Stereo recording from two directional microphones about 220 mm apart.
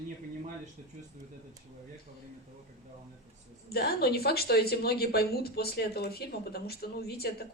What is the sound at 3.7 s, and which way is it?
Speech, 45° left (ahead or behind).